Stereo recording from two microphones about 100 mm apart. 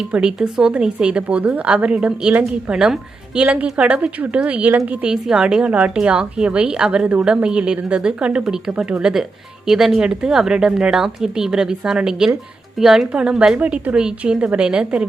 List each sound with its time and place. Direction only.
0.1 s a woman's voice: 10° right (ahead or behind)